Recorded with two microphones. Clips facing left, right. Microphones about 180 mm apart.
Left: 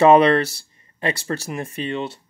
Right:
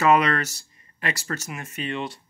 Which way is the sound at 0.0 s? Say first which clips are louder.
Left 7 dB; 30° left (ahead or behind).